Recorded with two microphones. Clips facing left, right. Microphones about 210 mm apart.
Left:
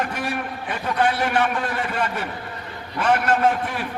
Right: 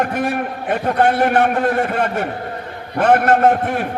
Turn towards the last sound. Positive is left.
turn(degrees=-55)  # may be behind; listen again after turning